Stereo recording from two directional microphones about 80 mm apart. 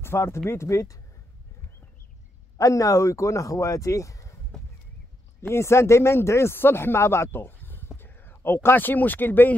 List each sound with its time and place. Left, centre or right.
0.0 s speech: left
2.5 s speech: left
5.5 s speech: left
8.0 s a sound: left
8.6 s speech: left